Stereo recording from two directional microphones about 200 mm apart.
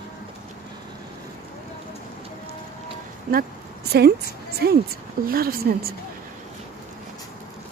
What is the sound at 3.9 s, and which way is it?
A woman's voice, 50° right (ahead or behind).